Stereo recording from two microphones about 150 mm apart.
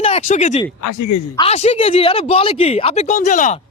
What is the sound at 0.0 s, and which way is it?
Speech, 50° left (ahead or behind).